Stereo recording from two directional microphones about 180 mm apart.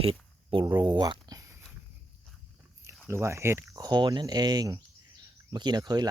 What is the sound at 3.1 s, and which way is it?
Speech, 15° right (ahead or behind).